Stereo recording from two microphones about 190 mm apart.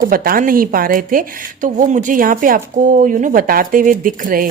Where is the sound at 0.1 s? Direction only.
50° right (ahead or behind).